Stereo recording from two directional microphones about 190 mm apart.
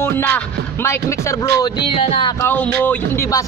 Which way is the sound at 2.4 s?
10° left (ahead or behind).